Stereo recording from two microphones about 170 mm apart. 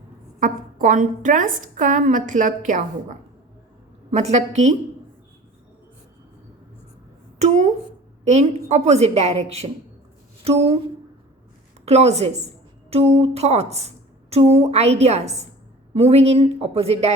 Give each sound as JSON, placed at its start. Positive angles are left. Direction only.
{"t": 0.3, "sound": "a woman's voice", "side_deg": -50}
{"t": 7.3, "sound": "a sound", "side_deg": -40}
{"t": 8.2, "sound": "a woman's voice", "side_deg": -40}
{"t": 11.9, "sound": "a woman's voice", "side_deg": -40}